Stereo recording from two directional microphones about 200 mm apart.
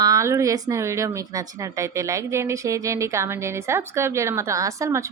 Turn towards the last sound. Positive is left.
turn(degrees=-15)  # may be behind; listen again after turning